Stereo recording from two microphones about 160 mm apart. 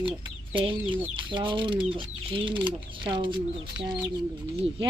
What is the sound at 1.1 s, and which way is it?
Speech, 30° right (ahead or behind).